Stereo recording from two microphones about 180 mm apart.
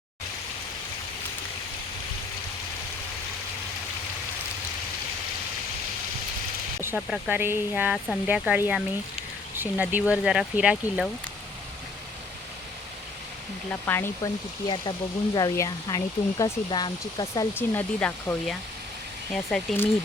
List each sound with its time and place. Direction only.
6.8 s speech: 5° right (ahead or behind)
13.7 s speech: 10° left (ahead or behind)
17.5 s speech: 10° left (ahead or behind)